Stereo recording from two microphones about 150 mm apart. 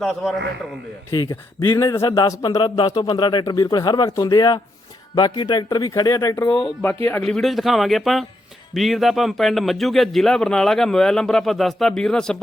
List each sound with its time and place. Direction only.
0.0 s speech: centre (ahead or behind)
1.1 s speech: 30° left (ahead or behind); by 7.3 s 15° left (ahead or behind)
7.3 s speech: centre (ahead or behind)